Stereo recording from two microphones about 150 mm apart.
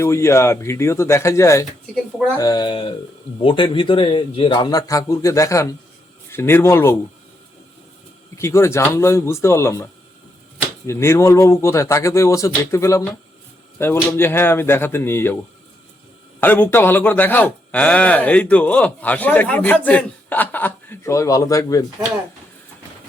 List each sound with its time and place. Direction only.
0.0 s a man's voice: 20° left (ahead or behind)
8.4 s a man's voice: 20° left (ahead or behind)
10.8 s a man's voice: 15° left (ahead or behind)
16.4 s a man's voice: 15° left (ahead or behind)